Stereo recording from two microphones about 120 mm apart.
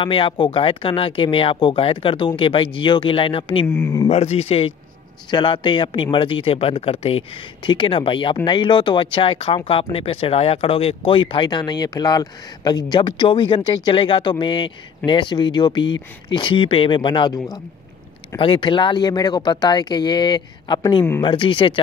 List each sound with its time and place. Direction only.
0.0 s speech: 45° left (ahead or behind)
3.6 s speech: 15° left (ahead or behind)
4.1 s speech: 60° left (ahead or behind); by 21.7 s 45° left (ahead or behind)